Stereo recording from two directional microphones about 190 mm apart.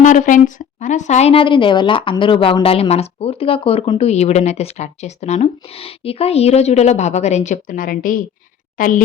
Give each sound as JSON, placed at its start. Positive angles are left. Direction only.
{"t": 0.0, "sound": "a woman's voice", "side_deg": 40}